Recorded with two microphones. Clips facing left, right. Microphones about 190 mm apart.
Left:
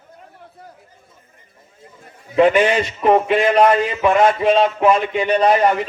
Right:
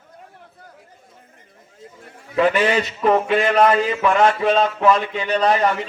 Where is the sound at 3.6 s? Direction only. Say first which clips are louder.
Left 2 dB; 15° left (ahead or behind).